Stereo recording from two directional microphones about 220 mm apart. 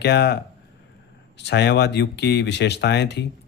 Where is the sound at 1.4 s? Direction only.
50° left (ahead or behind).